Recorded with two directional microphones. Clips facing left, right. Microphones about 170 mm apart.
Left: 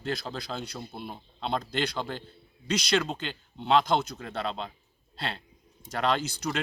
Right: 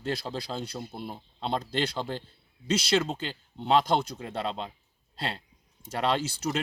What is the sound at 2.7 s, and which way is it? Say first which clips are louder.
A man's voice: right 1 dB; 25° right (ahead or behind).